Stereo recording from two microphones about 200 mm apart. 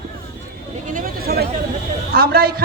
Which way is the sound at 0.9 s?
45° right (ahead or behind).